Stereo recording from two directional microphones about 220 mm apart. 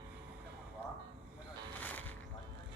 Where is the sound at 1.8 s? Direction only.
10° left (ahead or behind).